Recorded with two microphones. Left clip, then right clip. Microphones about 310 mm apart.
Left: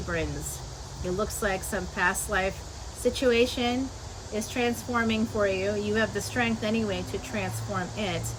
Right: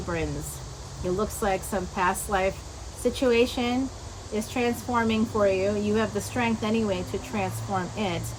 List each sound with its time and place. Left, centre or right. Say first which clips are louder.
1.4 s a woman's voice: right 2 dB; centre